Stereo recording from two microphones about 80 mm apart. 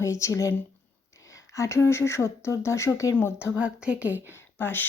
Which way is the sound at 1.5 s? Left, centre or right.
Left.